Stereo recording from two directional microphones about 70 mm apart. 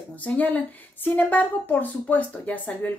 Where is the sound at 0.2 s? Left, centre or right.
Left.